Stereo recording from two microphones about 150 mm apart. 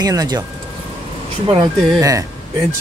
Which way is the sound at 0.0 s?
25° right (ahead or behind).